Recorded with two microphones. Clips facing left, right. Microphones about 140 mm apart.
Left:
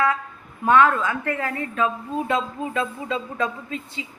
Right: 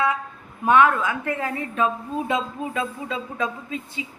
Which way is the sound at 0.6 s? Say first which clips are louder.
Even; 15° right (ahead or behind).